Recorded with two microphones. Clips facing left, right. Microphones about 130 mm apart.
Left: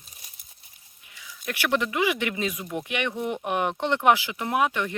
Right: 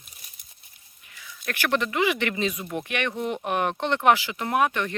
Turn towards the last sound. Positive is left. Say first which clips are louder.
# right 1 dB
turn(degrees=10)  # may be behind; listen again after turning